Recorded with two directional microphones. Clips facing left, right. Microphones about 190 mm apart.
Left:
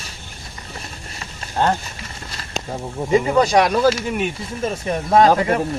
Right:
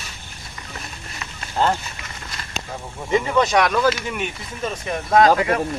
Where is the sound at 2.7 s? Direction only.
35° left (ahead or behind).